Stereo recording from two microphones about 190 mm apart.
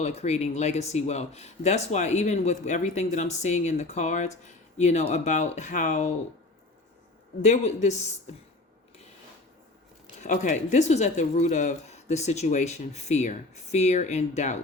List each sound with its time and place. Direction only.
0.0 s speech: 35° left (ahead or behind)
7.4 s speech: 35° left (ahead or behind)
10.2 s speech: 40° left (ahead or behind)